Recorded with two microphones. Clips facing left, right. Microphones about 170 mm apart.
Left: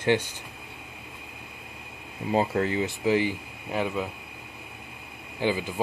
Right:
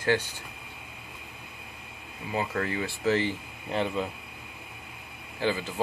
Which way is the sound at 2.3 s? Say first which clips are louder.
Left 5 dB; 30° left (ahead or behind).